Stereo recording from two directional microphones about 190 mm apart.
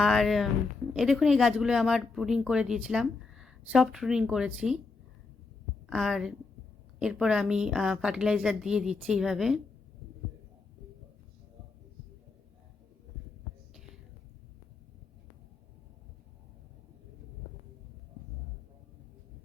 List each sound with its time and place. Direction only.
0.0 s speech: centre (ahead or behind)
5.9 s speech: centre (ahead or behind)